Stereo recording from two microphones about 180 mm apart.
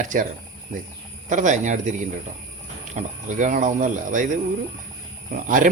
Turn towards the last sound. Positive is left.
turn(degrees=-50)  # may be behind; listen again after turning